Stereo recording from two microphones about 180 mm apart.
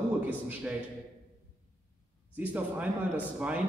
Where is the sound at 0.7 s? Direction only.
10° right (ahead or behind).